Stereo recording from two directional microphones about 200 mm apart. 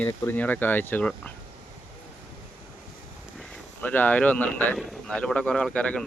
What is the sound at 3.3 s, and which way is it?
Speech, 10° left (ahead or behind).